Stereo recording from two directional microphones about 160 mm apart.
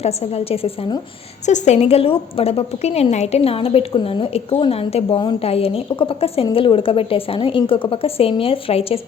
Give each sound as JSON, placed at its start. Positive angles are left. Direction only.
{"t": 0.0, "sound": "a woman's voice", "side_deg": 40}